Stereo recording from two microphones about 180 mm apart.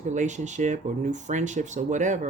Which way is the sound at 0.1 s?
40° right (ahead or behind).